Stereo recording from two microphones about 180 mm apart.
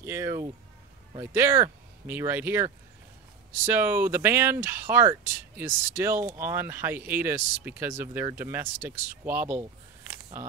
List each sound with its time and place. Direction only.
0.0 s speech: 15° right (ahead or behind)